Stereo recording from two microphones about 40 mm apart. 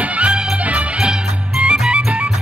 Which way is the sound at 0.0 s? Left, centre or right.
Right.